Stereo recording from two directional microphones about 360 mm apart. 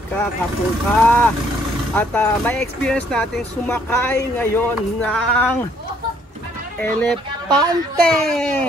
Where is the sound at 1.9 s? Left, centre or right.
Centre.